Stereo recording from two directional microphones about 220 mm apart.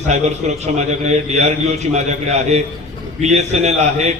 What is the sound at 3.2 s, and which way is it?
Speech, 30° right (ahead or behind).